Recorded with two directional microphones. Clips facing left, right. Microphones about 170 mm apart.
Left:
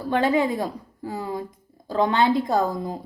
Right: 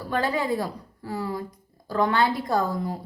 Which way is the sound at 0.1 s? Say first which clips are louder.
Left 4 dB; 20° left (ahead or behind).